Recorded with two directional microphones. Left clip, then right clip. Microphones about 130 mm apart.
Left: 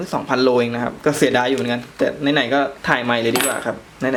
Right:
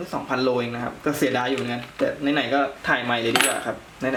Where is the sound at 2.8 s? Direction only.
35° left (ahead or behind).